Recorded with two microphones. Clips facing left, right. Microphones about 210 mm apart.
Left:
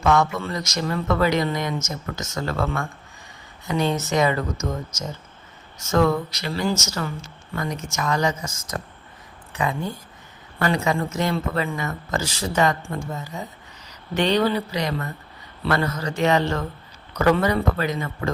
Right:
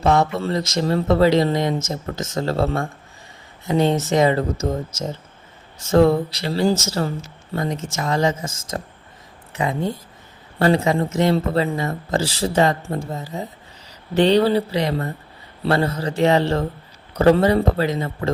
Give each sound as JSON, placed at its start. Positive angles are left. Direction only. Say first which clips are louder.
{"t": 0.0, "sound": "speech", "louder": "right 2 dB", "side_deg": -30}
{"t": 5.8, "sound": "speech", "louder": "right 5 dB", "side_deg": -30}